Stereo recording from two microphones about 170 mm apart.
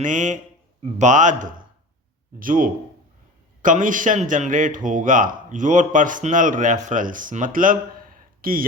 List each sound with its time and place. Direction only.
0.0 s speech: 50° right (ahead or behind)